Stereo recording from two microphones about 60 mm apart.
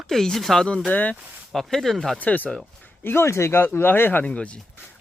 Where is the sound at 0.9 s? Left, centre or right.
Left.